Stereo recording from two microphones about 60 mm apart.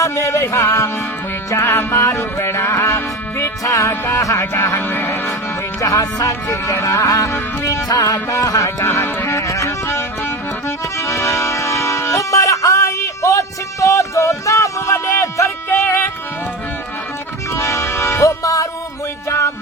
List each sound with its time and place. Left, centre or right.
0.0 s music: left
2.1 s music: left
3.6 s music: left
4.8 s speech: left
5.8 s music: left
6.5 s music: left
8.8 s speech: left
9.5 s music: left
17.5 s music: left
19.3 s music: left